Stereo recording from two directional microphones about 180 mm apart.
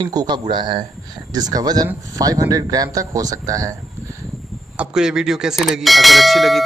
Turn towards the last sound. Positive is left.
turn(degrees=0)  # may be behind; listen again after turning